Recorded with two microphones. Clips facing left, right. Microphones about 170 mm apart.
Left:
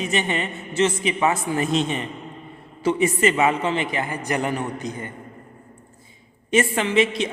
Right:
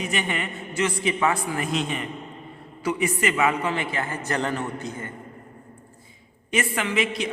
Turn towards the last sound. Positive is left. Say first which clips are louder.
# left 5 dB
turn(degrees=25)  # may be behind; listen again after turning